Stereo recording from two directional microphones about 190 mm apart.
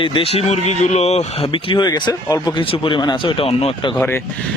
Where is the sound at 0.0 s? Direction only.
30° left (ahead or behind).